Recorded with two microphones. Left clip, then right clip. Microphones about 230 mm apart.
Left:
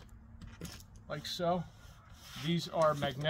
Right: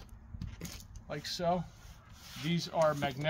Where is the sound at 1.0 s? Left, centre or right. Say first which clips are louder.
Right 1 dB; centre.